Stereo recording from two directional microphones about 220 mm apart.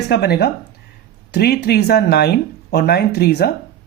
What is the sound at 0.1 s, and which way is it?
Speech, 45° left (ahead or behind).